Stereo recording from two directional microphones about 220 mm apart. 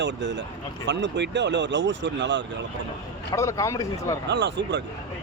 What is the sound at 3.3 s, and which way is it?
Speech, 15° left (ahead or behind).